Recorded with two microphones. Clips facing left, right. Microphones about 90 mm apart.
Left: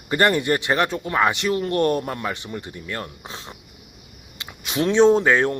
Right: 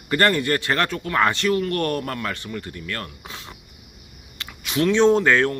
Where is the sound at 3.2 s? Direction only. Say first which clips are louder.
Left 2 dB; 30° left (ahead or behind); by 5.5 s 15° left (ahead or behind).